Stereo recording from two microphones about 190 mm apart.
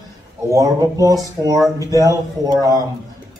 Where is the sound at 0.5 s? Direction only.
20° right (ahead or behind).